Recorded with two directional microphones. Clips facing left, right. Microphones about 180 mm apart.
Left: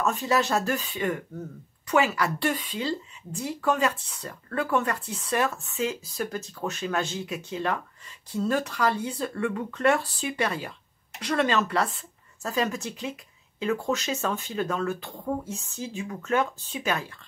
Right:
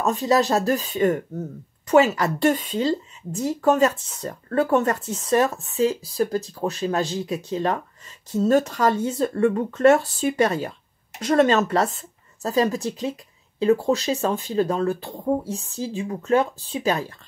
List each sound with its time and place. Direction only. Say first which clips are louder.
0.0 s speech: right 5 dB; 35° right (ahead or behind)